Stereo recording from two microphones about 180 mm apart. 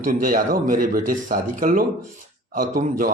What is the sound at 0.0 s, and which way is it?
A man's voice, 50° right (ahead or behind).